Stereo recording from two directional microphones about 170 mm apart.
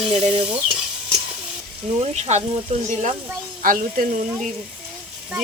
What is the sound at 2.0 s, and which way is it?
Speech, 40° right (ahead or behind).